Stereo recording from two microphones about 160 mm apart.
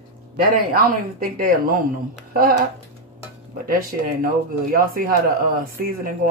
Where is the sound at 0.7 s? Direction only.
60° right (ahead or behind).